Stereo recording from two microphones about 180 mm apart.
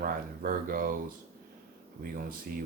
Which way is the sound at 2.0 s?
55° right (ahead or behind).